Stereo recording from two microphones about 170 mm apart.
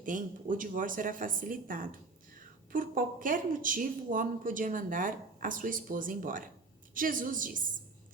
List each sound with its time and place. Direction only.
0.0 s speech: 50° right (ahead or behind)